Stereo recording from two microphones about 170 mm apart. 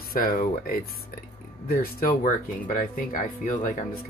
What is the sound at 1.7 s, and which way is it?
Speech, 60° left (ahead or behind).